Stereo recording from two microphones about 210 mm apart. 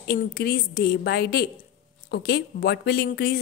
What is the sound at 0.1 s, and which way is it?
A woman's voice, 45° left (ahead or behind).